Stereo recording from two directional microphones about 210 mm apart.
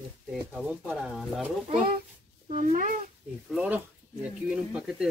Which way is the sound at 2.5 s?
35° right (ahead or behind).